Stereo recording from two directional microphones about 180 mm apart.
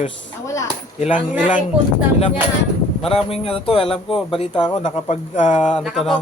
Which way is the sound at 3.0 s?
30° left (ahead or behind).